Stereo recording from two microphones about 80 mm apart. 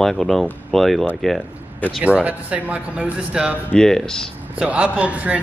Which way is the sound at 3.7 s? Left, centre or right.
Centre.